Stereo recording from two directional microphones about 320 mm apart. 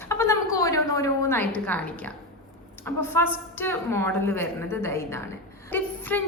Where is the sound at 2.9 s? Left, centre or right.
Centre.